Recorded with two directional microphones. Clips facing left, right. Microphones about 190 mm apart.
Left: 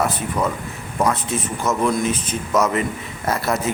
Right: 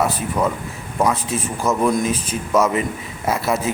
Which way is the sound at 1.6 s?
5° right (ahead or behind).